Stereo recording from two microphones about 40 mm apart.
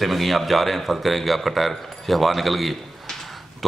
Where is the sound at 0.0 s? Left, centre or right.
Centre.